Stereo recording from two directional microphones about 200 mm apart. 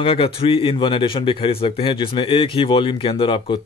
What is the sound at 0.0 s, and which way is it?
Speech, 25° left (ahead or behind).